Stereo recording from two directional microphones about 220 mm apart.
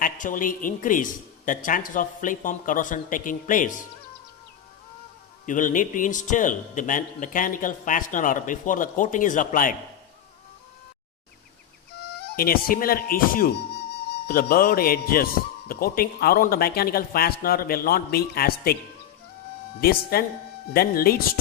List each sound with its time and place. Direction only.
0.0 s speech: 35° left (ahead or behind)
5.5 s speech: 35° left (ahead or behind)
12.4 s a man's voice: 40° left (ahead or behind)
19.8 s a man's voice: 45° left (ahead or behind)